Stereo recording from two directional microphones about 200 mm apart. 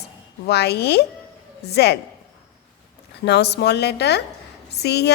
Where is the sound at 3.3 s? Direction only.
55° left (ahead or behind).